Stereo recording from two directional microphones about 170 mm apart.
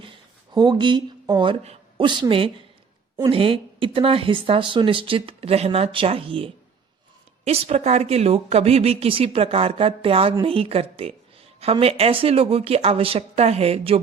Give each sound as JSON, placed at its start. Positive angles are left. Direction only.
{"t": 0.5, "sound": "a woman's voice", "side_deg": -25}